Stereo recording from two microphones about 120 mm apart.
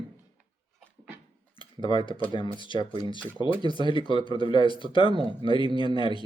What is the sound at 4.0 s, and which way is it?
Speech, 45° left (ahead or behind).